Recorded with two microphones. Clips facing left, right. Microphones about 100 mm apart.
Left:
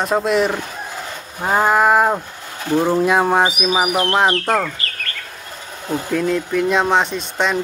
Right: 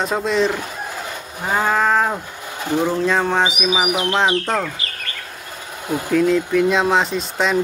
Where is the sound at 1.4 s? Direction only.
15° left (ahead or behind).